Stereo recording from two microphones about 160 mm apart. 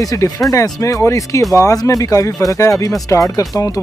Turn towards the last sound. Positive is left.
turn(degrees=20)  # may be behind; listen again after turning